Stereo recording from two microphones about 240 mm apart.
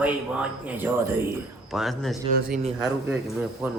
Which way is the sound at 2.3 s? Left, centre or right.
Right.